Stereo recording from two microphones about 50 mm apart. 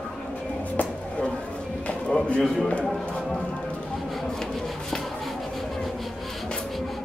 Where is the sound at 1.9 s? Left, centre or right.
Left.